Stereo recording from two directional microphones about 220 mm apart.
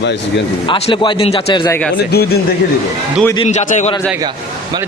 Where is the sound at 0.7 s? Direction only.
25° left (ahead or behind).